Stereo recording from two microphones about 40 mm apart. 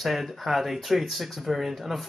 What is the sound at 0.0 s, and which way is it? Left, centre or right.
Speech, centre.